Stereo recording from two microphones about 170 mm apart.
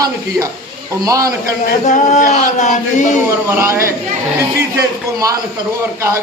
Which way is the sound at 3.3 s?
15° right (ahead or behind).